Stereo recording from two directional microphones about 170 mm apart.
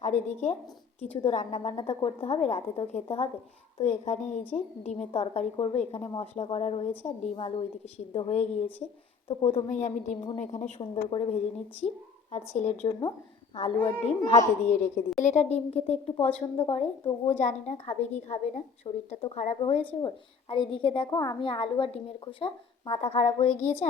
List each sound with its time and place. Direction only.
0.0 s a woman's voice: 45° left (ahead or behind)
1.7 s a woman's voice: 30° left (ahead or behind)
10.8 s a woman's voice: 35° left (ahead or behind)
12.5 s a woman's voice: 40° left (ahead or behind)